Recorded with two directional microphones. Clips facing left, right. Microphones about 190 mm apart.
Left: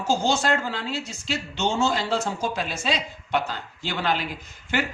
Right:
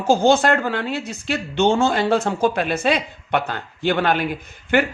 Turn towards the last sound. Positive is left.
turn(degrees=-55)  # may be behind; listen again after turning